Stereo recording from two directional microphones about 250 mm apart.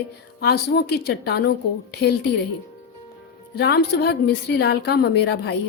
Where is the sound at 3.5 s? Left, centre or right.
Left.